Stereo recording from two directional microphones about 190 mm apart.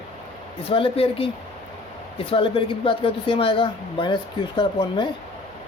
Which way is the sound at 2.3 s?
25° left (ahead or behind).